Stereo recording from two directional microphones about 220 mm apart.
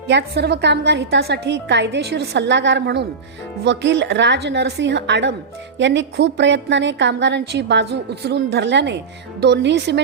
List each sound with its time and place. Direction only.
0.1 s a woman's voice: 45° right (ahead or behind)